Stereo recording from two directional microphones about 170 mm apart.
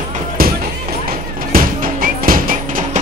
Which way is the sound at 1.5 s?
55° right (ahead or behind).